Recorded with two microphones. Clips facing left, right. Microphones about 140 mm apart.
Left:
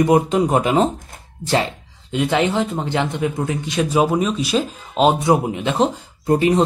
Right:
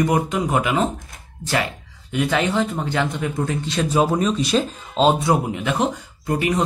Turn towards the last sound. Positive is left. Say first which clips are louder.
# left 5 dB
turn(degrees=30)  # may be behind; listen again after turning